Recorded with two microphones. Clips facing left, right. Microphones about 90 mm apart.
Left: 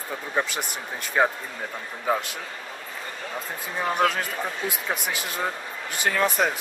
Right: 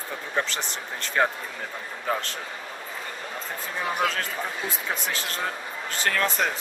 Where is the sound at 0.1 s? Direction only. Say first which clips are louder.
Left 2 dB; 10° left (ahead or behind).